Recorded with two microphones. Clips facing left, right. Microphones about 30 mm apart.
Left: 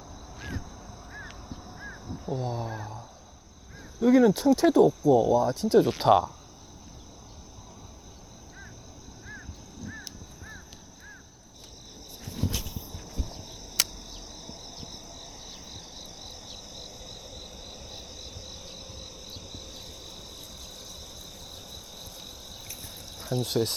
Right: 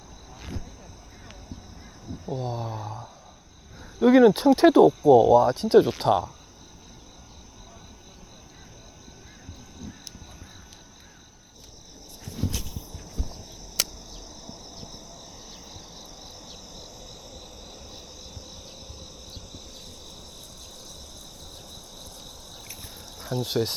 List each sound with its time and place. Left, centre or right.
0.3 s a sound: centre
2.2 s speech: centre
4.0 s speech: right
5.9 s speech: centre
12.4 s cricket: centre
21.7 s cricket: centre
23.1 s speech: centre